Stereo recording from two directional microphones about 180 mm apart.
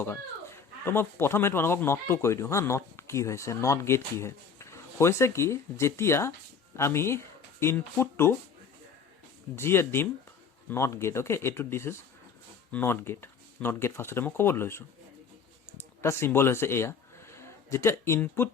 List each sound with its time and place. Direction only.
0.0 s speech: 15° left (ahead or behind)
9.6 s speech: 15° left (ahead or behind)
16.0 s speech: 15° left (ahead or behind)